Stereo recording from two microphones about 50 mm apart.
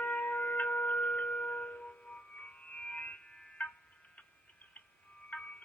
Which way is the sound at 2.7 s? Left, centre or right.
Left.